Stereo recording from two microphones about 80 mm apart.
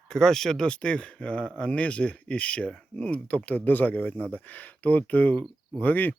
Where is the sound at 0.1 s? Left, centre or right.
Centre.